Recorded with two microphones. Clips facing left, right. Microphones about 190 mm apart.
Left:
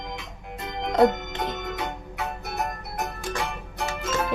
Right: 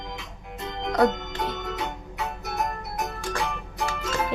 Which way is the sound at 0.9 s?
20° left (ahead or behind).